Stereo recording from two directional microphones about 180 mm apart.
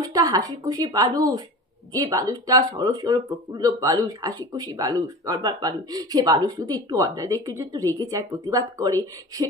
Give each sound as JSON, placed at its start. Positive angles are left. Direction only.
{"t": 0.1, "sound": "speech", "side_deg": -20}